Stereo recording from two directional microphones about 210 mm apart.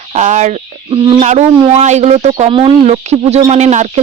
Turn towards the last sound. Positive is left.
turn(degrees=-35)  # may be behind; listen again after turning